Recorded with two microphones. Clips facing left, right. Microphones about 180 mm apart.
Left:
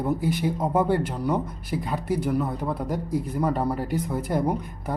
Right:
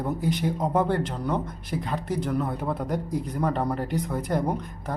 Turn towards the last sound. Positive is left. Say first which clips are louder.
# left 1 dB
turn(degrees=5)  # may be behind; listen again after turning